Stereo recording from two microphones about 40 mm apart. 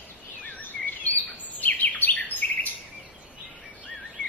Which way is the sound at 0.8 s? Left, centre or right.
Left.